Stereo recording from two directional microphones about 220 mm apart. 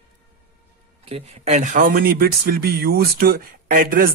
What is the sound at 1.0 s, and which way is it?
Speech, 25° right (ahead or behind).